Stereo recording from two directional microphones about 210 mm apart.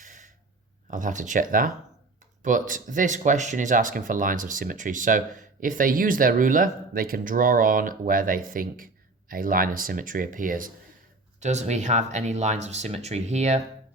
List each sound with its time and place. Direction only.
0.0 s gasp: 35° right (ahead or behind)
0.9 s speech: 40° right (ahead or behind)